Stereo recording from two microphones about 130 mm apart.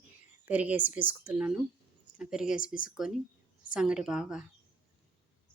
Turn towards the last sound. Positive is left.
turn(degrees=-5)  # may be behind; listen again after turning